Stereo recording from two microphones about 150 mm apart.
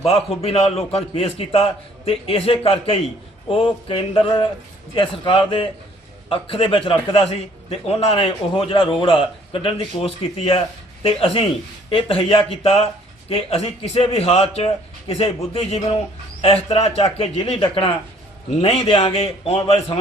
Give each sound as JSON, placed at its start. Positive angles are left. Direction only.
{"t": 0.0, "sound": "a man's voice", "side_deg": 40}